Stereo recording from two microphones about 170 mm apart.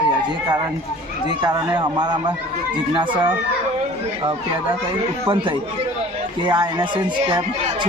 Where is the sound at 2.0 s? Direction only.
25° right (ahead or behind).